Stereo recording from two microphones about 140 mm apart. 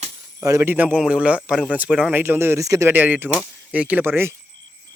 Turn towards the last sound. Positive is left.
turn(degrees=-15)  # may be behind; listen again after turning